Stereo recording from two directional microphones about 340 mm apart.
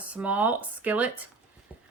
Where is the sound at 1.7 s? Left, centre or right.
Centre.